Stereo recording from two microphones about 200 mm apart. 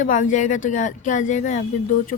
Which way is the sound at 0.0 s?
40° left (ahead or behind).